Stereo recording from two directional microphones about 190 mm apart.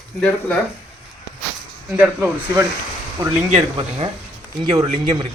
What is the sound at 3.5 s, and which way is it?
Speech, 30° right (ahead or behind).